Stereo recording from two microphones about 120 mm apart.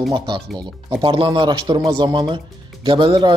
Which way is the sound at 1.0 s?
45° right (ahead or behind).